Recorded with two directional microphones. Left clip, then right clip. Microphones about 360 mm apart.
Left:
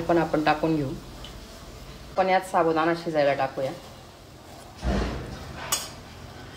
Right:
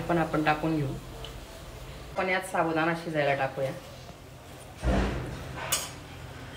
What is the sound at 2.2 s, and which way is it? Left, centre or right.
A woman's voice, left.